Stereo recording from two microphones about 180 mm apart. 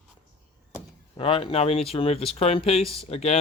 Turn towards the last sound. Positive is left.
turn(degrees=35)  # may be behind; listen again after turning